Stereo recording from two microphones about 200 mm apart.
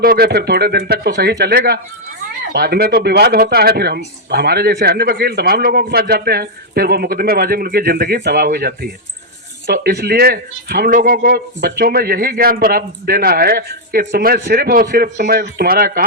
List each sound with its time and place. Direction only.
0.0 s speech: 50° right (ahead or behind)